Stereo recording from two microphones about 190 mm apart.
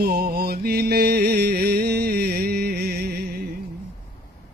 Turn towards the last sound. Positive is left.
turn(degrees=-55)  # may be behind; listen again after turning